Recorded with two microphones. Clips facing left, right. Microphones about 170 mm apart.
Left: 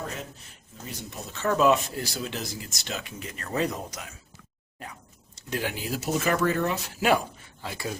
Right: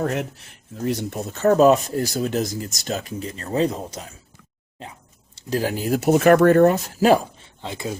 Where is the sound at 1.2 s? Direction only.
45° right (ahead or behind).